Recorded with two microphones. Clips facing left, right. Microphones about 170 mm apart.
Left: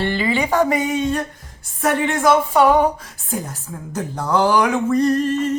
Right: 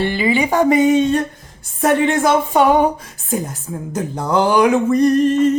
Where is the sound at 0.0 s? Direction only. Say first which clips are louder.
Right 3 dB; 15° right (ahead or behind).